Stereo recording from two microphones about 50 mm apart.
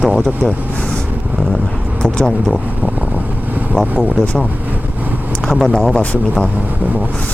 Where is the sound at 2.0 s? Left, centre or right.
Centre.